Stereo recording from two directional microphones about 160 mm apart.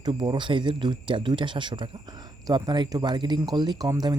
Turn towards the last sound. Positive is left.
turn(degrees=-25)  # may be behind; listen again after turning